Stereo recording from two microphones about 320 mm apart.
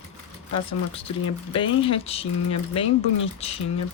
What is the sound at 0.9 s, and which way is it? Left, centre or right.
Speech, centre.